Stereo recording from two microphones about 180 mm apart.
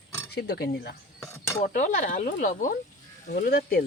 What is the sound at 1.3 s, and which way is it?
Speech, 15° left (ahead or behind).